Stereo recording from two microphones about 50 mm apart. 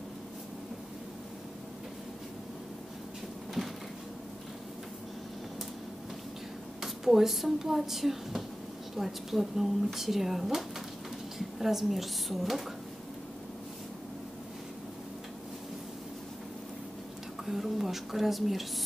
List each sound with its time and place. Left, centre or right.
6.8 s a woman's voice: centre
17.5 s a woman's voice: centre